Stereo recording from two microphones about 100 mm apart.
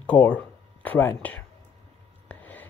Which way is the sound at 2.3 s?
15° left (ahead or behind).